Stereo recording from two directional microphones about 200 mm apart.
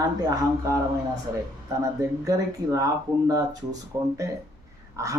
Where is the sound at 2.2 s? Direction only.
15° right (ahead or behind).